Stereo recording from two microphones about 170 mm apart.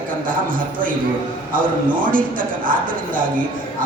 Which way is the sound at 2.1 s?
55° right (ahead or behind).